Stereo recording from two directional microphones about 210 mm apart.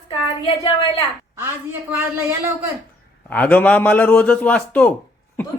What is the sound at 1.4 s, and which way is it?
Speech, 10° right (ahead or behind).